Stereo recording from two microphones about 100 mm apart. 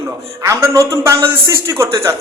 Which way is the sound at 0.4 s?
35° right (ahead or behind).